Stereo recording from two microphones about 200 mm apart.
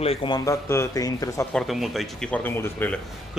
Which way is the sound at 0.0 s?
25° left (ahead or behind).